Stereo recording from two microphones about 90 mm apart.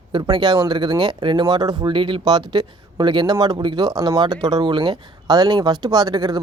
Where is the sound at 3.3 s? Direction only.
45° right (ahead or behind).